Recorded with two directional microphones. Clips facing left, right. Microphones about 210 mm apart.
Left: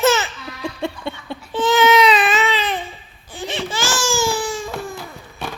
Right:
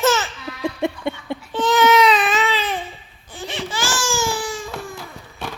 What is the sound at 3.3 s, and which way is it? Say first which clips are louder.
Baby cry: left 2 dB; 25° left (ahead or behind).